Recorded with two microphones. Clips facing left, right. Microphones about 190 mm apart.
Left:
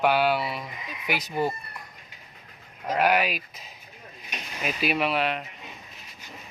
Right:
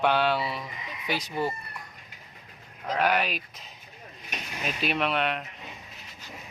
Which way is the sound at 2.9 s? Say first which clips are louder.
Left 3 dB; 10° left (ahead or behind).